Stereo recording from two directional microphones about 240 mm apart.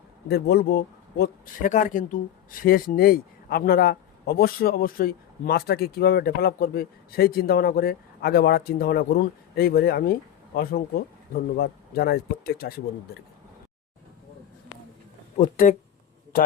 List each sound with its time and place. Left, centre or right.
0.3 s a man's voice: left
15.4 s a man's voice: left